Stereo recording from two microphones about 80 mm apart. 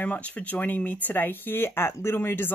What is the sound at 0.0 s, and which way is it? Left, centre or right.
Speech, centre.